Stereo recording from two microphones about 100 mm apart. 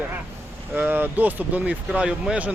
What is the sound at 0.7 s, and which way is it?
Speech, 20° right (ahead or behind).